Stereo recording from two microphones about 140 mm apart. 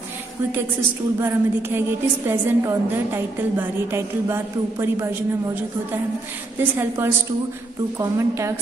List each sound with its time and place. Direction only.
1.2 s a woman's voice: 15° right (ahead or behind)
6.6 s a woman's voice: 15° right (ahead or behind)